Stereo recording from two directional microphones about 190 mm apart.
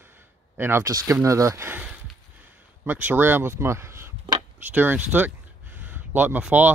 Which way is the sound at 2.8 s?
10° right (ahead or behind).